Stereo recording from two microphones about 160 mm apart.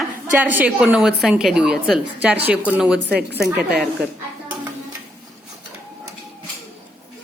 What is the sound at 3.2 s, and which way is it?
Speech, 90° right.